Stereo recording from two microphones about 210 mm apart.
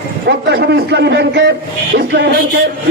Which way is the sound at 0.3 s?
55° right (ahead or behind).